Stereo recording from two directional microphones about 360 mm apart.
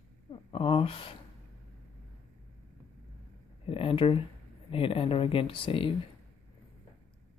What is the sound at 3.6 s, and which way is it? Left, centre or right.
Speech, centre.